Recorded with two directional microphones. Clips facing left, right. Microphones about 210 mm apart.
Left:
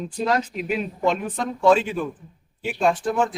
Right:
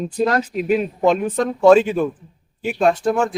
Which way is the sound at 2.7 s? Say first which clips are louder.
Right 4 dB; 70° right (ahead or behind).